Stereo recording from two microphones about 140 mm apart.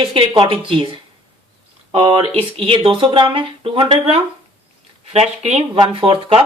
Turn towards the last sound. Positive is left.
turn(degrees=-40)  # may be behind; listen again after turning